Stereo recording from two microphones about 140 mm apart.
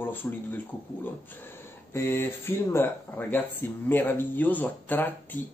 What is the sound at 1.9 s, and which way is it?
Speech, 15° left (ahead or behind).